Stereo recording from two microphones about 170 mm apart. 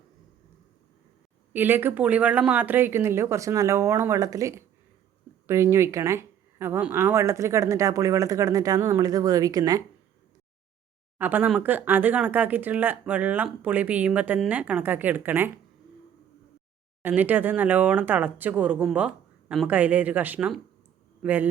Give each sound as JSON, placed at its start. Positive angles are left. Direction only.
{"t": 1.5, "sound": "speech", "side_deg": -10}
{"t": 11.2, "sound": "speech", "side_deg": -10}
{"t": 17.0, "sound": "speech", "side_deg": -10}